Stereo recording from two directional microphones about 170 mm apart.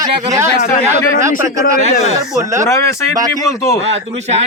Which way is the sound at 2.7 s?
20° left (ahead or behind).